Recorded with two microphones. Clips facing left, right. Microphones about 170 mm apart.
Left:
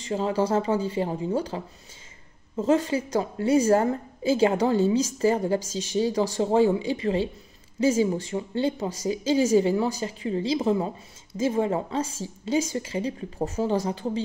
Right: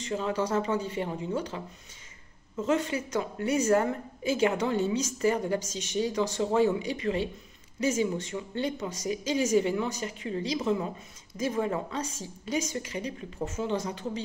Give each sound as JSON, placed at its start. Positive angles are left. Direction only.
{"t": 0.0, "sound": "a woman's voice", "side_deg": 30}